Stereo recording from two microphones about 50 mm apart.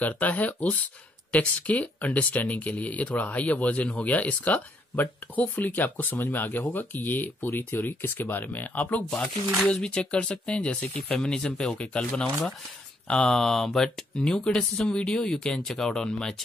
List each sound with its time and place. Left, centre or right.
0.0 s speech: left
9.7 s speech: centre
13.1 s speech: centre